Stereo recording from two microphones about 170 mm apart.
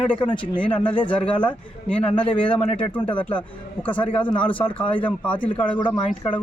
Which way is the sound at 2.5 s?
10° left (ahead or behind).